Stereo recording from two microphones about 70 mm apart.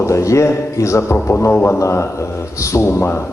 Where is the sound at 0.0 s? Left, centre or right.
Left.